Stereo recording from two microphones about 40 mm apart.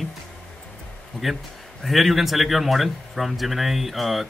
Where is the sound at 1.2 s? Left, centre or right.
Left.